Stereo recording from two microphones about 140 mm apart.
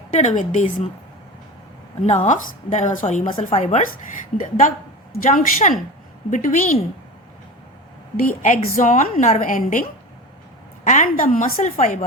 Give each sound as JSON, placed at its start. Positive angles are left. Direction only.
{"t": 0.1, "sound": "a woman's voice", "side_deg": 60}
{"t": 2.0, "sound": "a woman's voice", "side_deg": 60}
{"t": 4.4, "sound": "a woman's voice", "side_deg": 70}
{"t": 8.2, "sound": "a woman's voice", "side_deg": 70}
{"t": 8.6, "sound": "a woman's voice", "side_deg": 55}
{"t": 10.8, "sound": "a woman's voice", "side_deg": 65}